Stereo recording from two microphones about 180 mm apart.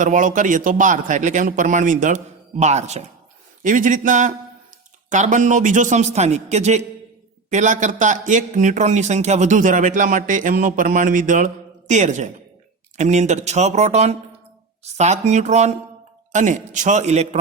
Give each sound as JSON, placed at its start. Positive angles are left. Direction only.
{"t": 0.0, "sound": "a man's voice", "side_deg": -45}